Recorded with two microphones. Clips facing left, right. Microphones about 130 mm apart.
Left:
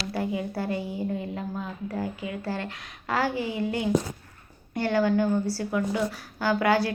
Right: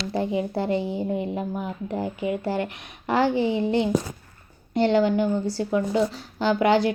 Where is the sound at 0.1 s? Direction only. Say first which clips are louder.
Right 5 dB; 25° right (ahead or behind).